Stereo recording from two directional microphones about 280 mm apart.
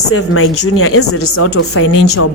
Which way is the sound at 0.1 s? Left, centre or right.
Left.